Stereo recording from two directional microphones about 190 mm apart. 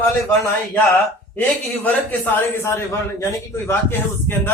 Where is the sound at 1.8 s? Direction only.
10° left (ahead or behind).